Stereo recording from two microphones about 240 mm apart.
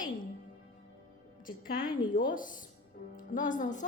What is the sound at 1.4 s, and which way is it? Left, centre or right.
A woman's voice, left.